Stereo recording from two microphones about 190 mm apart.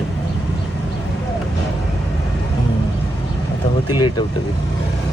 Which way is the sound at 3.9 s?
20° left (ahead or behind).